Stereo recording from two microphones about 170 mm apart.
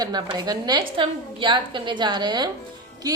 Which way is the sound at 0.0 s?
25° right (ahead or behind).